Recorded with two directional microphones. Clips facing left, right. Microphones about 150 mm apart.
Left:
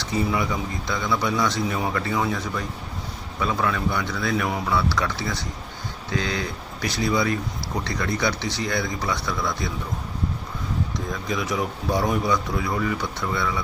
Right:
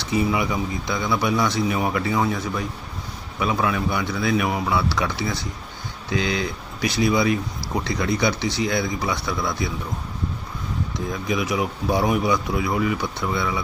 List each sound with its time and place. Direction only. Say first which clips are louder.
0.1 s speech: right 2 dB; 10° right (ahead or behind)
11.3 s speech: right 2 dB; 10° right (ahead or behind)